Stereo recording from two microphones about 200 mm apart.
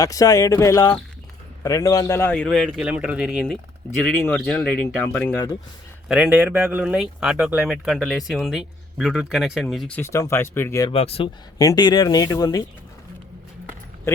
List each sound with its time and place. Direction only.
0.0 s speech: 15° left (ahead or behind)
6.1 s speech: 5° right (ahead or behind); by 10.9 s 15° left (ahead or behind)
10.9 s speech: 30° left (ahead or behind)
11.5 s speech: 20° left (ahead or behind)